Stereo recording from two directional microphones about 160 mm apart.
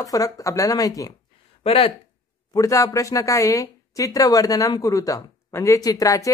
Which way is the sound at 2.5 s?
20° left (ahead or behind).